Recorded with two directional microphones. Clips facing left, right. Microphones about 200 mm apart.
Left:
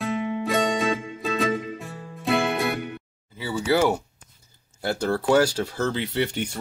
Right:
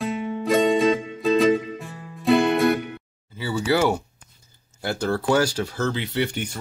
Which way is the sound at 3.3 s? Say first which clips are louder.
Even; 20° left (ahead or behind).